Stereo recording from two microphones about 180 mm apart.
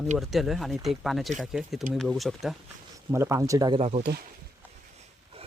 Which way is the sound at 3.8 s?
40° right (ahead or behind).